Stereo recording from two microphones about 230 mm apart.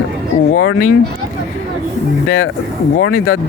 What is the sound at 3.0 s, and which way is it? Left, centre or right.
Speech, left.